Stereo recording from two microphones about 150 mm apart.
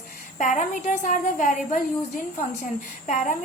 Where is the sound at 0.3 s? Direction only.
55° left (ahead or behind).